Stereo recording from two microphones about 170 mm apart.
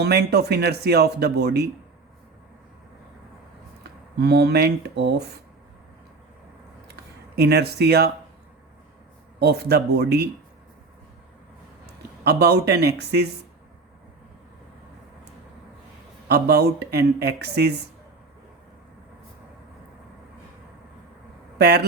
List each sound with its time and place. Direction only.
0.0 s speech: 75° right (ahead or behind)
4.2 s speech: 70° right (ahead or behind)
6.8 s a sound: 70° right (ahead or behind)
9.4 s speech: 70° right (ahead or behind)
12.2 s speech: 75° right (ahead or behind)
16.3 s speech: 75° right (ahead or behind)